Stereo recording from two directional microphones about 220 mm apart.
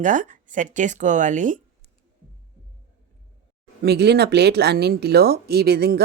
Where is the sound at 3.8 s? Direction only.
50° right (ahead or behind).